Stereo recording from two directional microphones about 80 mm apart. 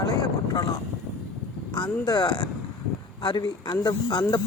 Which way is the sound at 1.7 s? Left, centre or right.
Left.